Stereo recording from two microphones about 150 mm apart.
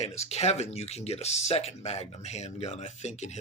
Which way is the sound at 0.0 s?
45° left (ahead or behind).